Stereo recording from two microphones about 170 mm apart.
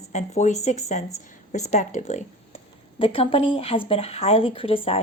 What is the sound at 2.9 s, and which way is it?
Speech, 35° left (ahead or behind).